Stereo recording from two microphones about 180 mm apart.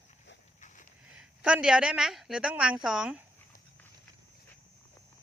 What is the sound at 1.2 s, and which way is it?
A woman's voice, 5° right (ahead or behind).